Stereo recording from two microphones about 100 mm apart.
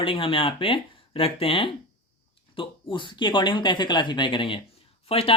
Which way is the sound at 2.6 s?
55° left (ahead or behind).